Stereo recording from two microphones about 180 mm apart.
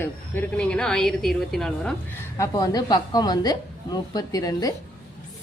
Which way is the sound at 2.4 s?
20° left (ahead or behind).